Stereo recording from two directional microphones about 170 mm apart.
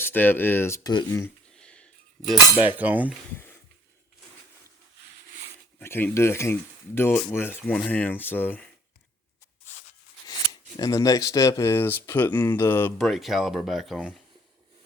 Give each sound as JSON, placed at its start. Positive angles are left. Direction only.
{"t": 0.0, "sound": "speech", "side_deg": 10}
{"t": 1.5, "sound": "a sound", "side_deg": 5}
{"t": 2.7, "sound": "cutlery", "side_deg": -10}
{"t": 3.3, "sound": "a sound", "side_deg": 10}
{"t": 5.8, "sound": "speech", "side_deg": 15}
{"t": 10.8, "sound": "speech", "side_deg": 20}
{"t": 13.0, "sound": "speech", "side_deg": 0}